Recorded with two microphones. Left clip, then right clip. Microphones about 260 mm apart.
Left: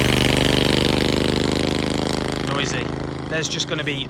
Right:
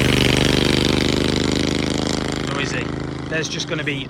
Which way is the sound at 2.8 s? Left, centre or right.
Left.